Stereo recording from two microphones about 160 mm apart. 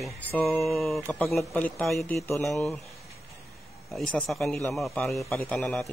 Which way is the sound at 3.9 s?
Centre (ahead or behind).